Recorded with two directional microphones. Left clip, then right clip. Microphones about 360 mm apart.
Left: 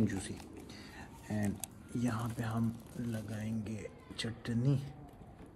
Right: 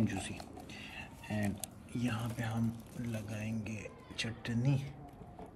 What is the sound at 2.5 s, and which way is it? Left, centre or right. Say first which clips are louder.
Speech: left 1 dB; centre.